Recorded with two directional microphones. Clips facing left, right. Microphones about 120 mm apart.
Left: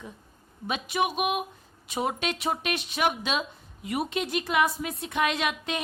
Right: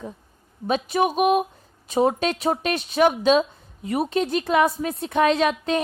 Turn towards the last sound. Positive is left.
turn(degrees=-35)  # may be behind; listen again after turning